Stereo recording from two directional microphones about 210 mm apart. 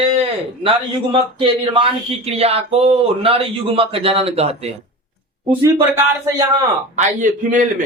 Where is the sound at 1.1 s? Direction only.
25° right (ahead or behind).